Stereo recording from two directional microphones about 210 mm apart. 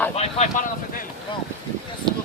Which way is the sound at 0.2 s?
30° left (ahead or behind).